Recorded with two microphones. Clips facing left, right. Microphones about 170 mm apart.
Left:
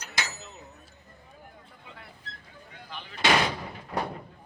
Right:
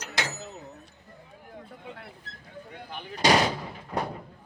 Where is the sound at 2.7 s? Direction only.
50° right (ahead or behind); by 3.5 s 35° right (ahead or behind).